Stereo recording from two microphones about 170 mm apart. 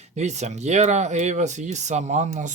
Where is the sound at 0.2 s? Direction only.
40° right (ahead or behind).